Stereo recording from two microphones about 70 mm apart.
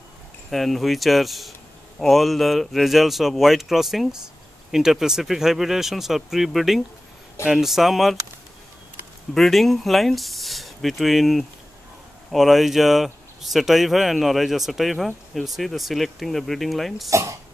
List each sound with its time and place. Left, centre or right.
0.5 s speech: centre
9.3 s speech: centre
17.1 s speech: right